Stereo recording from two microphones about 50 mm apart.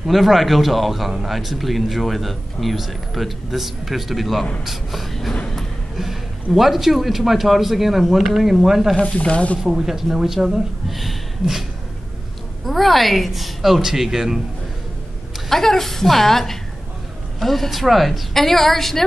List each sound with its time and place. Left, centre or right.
0.0 s speech: centre
8.9 s speech: left
9.6 s speech: centre
12.6 s speech: centre
15.5 s a woman's voice: centre